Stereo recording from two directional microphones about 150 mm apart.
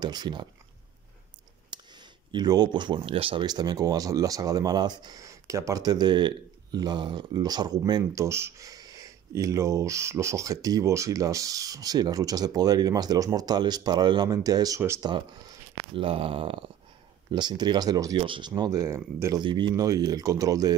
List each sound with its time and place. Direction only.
0.0 s speech: 30° right (ahead or behind)
1.7 s speech: 30° right (ahead or behind)
15.0 s a sound: 30° right (ahead or behind)
17.3 s speech: 30° right (ahead or behind)
18.5 s speech: 25° right (ahead or behind)
19.4 s a sound: 30° right (ahead or behind)
19.7 s speech: 25° right (ahead or behind)